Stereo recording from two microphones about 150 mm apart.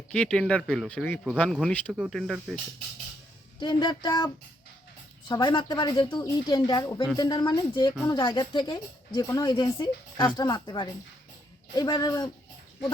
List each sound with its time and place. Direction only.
0.1 s speech: 5° left (ahead or behind)
3.6 s speech: 30° left (ahead or behind)
5.3 s speech: 30° left (ahead or behind)